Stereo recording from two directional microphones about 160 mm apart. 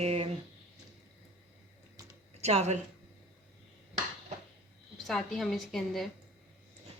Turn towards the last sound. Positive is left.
turn(degrees=0)  # may be behind; listen again after turning